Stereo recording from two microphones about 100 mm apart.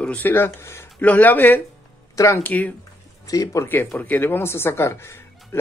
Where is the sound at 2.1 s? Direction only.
30° left (ahead or behind).